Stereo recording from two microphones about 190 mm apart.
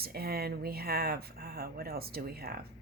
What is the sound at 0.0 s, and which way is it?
Speech, 55° right (ahead or behind).